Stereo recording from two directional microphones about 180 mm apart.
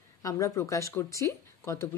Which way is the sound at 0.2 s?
15° left (ahead or behind).